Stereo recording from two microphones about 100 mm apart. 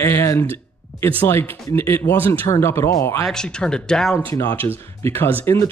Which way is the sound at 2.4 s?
30° left (ahead or behind).